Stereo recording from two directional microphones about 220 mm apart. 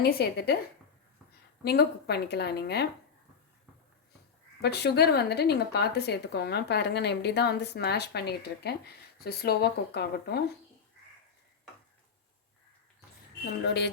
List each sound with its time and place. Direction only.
0.0 s a woman's voice: 45° left (ahead or behind)
1.6 s a woman's voice: 45° left (ahead or behind)
4.6 s a woman's voice: 50° left (ahead or behind)
13.7 s a woman's voice: 50° left (ahead or behind)